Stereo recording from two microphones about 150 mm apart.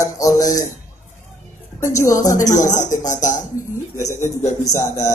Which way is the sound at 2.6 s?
55° left (ahead or behind).